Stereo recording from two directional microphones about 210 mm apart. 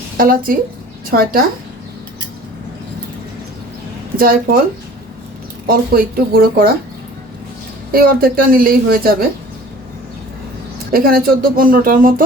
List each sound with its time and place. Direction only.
0.2 s speech: 40° right (ahead or behind)
4.2 s speech: 45° right (ahead or behind)
5.6 s speech: 45° right (ahead or behind)
7.9 s speech: 45° right (ahead or behind)
10.9 s speech: 45° right (ahead or behind)